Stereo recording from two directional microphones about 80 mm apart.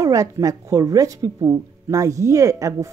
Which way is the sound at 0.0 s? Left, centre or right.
Right.